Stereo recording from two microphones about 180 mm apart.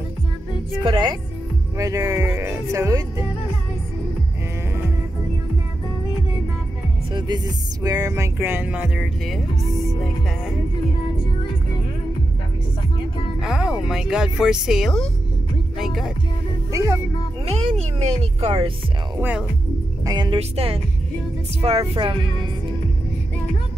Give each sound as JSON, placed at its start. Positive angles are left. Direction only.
{"t": 0.8, "sound": "speech", "side_deg": -25}
{"t": 1.8, "sound": "music", "side_deg": -20}
{"t": 7.1, "sound": "music", "side_deg": -25}
{"t": 13.4, "sound": "speech", "side_deg": -5}
{"t": 16.7, "sound": "music", "side_deg": -20}
{"t": 17.5, "sound": "speech", "side_deg": -35}
{"t": 19.1, "sound": "speech", "side_deg": -10}
{"t": 20.1, "sound": "speech", "side_deg": -25}